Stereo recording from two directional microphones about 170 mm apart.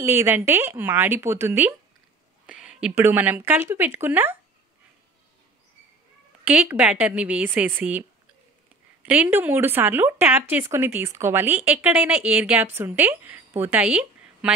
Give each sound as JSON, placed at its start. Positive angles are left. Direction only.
{"t": 0.0, "sound": "speech", "side_deg": -15}
{"t": 6.4, "sound": "speech", "side_deg": -10}
{"t": 9.0, "sound": "speech", "side_deg": -10}